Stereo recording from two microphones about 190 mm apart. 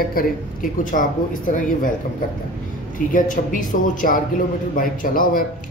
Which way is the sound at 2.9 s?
45° left (ahead or behind).